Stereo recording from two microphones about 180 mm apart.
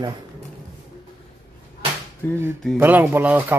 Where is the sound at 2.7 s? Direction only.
10° right (ahead or behind).